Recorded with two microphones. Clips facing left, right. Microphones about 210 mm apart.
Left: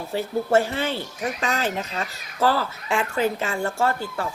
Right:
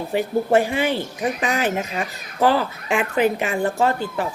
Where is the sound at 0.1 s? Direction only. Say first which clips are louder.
Right 2 dB; 15° right (ahead or behind).